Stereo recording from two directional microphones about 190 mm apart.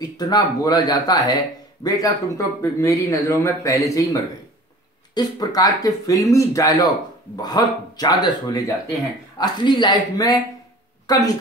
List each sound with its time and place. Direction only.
0.0 s a man's voice: 20° left (ahead or behind)